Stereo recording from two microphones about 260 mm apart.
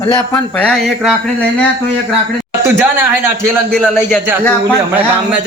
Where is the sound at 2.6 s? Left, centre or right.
Centre.